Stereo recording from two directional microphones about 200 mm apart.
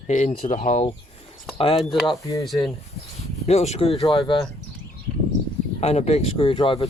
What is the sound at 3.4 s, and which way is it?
Speech, 35° left (ahead or behind).